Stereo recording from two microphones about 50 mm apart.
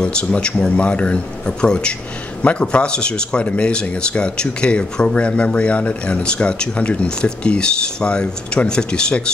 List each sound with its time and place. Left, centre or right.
0.0 s speech: left